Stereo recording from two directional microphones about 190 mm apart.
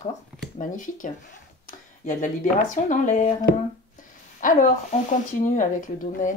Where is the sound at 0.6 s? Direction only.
45° left (ahead or behind).